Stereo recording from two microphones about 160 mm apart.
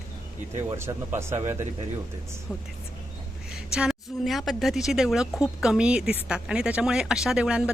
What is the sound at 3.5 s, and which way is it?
Speech, 5° right (ahead or behind).